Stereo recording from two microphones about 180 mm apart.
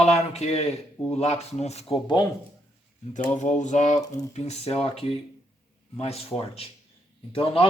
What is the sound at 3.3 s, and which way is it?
Speech, 40° left (ahead or behind).